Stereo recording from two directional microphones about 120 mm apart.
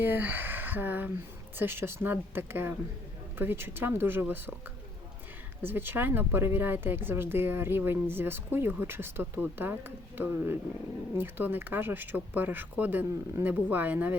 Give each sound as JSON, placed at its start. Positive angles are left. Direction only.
{"t": 0.0, "sound": "speech", "side_deg": -15}
{"t": 5.6, "sound": "speech", "side_deg": -20}